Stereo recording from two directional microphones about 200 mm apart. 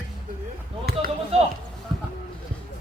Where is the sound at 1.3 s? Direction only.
30° right (ahead or behind).